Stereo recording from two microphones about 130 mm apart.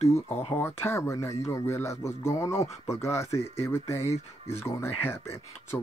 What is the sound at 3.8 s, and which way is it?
Speech, 55° left (ahead or behind).